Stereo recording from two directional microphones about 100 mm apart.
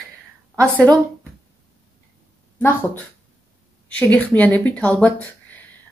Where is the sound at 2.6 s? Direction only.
20° left (ahead or behind).